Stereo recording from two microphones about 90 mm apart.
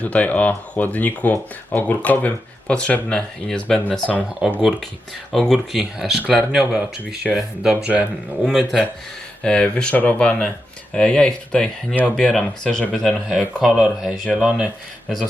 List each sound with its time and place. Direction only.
0.0 s speech: 15° left (ahead or behind)
4.4 s speech: 10° right (ahead or behind)
5.3 s speech: centre (ahead or behind)
9.4 s speech: 10° left (ahead or behind); by 14.7 s 5° right (ahead or behind)